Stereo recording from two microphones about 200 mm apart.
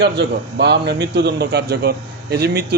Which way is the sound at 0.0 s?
55° right (ahead or behind).